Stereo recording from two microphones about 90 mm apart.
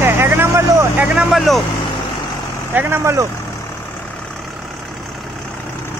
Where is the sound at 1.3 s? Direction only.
Centre (ahead or behind).